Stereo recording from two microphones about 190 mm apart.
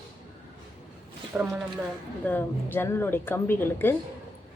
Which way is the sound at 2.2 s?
10° left (ahead or behind).